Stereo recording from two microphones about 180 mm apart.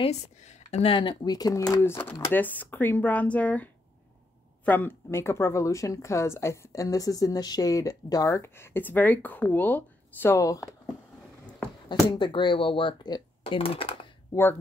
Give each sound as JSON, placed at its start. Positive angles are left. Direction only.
{"t": 0.0, "sound": "speech", "side_deg": 40}
{"t": 11.9, "sound": "speech", "side_deg": 25}